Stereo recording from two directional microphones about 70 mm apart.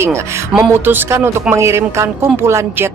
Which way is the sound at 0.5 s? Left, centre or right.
Centre.